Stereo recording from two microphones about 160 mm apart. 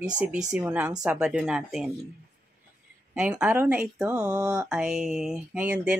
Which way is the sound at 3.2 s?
5° right (ahead or behind).